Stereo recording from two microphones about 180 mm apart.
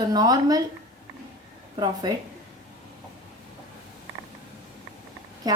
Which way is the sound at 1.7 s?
25° right (ahead or behind).